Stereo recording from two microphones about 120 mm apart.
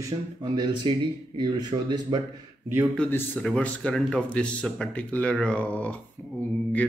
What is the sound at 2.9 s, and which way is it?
Speech, 15° left (ahead or behind).